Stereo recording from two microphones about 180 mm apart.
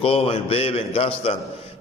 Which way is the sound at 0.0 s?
30° left (ahead or behind).